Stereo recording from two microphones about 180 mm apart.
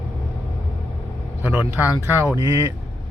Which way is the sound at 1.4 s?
10° right (ahead or behind).